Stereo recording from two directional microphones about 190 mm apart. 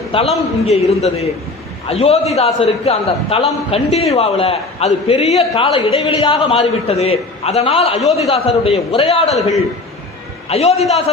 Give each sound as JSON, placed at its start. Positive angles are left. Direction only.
{"t": 0.1, "sound": "a man's voice", "side_deg": 30}
{"t": 10.5, "sound": "a man's voice", "side_deg": 35}